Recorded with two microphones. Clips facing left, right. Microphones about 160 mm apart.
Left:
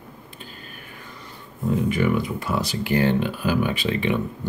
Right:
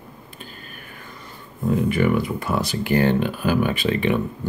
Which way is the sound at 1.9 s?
50° right (ahead or behind).